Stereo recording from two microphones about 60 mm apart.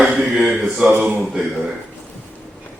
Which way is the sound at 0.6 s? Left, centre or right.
Centre.